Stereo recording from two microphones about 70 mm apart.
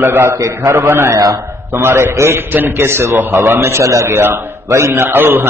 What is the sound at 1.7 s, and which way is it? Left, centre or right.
A man's voice, right.